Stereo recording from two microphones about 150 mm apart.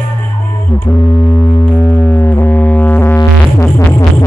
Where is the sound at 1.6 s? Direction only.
15° left (ahead or behind).